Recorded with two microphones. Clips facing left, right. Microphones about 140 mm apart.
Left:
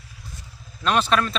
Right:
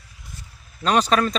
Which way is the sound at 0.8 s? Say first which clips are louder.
Right 2 dB; 35° right (ahead or behind).